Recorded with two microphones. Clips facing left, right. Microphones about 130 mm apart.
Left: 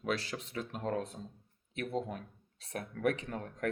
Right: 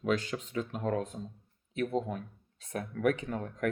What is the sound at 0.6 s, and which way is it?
Speech, 35° right (ahead or behind).